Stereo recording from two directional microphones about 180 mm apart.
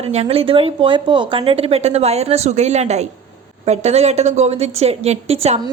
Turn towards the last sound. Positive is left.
turn(degrees=-35)  # may be behind; listen again after turning